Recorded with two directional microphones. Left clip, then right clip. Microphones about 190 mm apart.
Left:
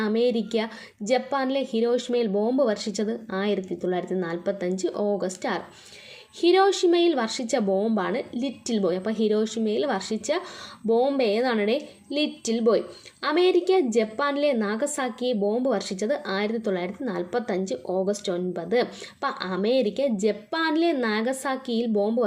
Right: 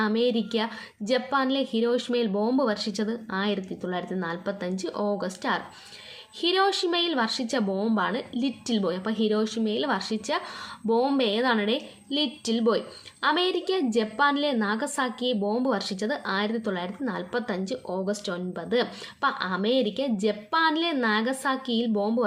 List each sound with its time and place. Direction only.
0.0 s a woman's voice: 15° left (ahead or behind)